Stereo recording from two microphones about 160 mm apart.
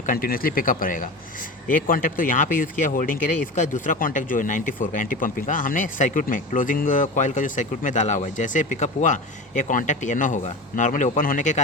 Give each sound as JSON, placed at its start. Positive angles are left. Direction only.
{"t": 0.0, "sound": "speech", "side_deg": 65}